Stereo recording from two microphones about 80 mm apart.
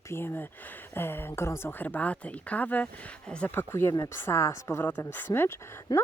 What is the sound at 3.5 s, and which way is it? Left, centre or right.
Speech, left.